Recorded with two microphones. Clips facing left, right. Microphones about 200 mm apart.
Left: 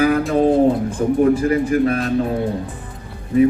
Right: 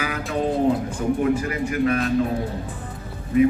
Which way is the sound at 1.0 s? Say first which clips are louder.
Left 8 dB; 40° left (ahead or behind).